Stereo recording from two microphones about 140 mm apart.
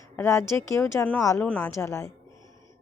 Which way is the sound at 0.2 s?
20° left (ahead or behind).